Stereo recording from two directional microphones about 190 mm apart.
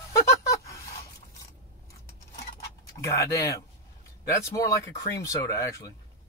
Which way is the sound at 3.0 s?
15° left (ahead or behind).